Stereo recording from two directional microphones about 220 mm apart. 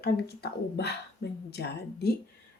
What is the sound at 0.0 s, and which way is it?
A woman's voice, 45° left (ahead or behind).